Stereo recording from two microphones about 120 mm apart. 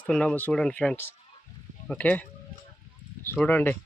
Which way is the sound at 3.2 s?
15° left (ahead or behind).